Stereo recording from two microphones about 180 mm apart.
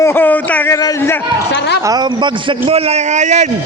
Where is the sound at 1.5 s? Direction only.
70° left (ahead or behind).